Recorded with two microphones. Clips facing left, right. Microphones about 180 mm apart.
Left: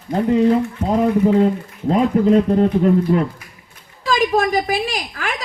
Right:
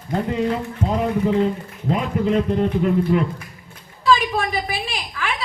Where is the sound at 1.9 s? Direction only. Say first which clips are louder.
Left 6 dB; 40° left (ahead or behind).